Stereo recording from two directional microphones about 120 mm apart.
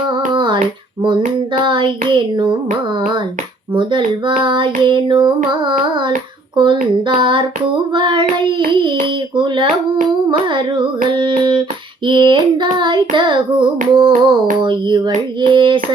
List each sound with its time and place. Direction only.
0.3 s child singing: 40° right (ahead or behind)
1.6 s child singing: 40° right (ahead or behind)
3.8 s child singing: 40° right (ahead or behind)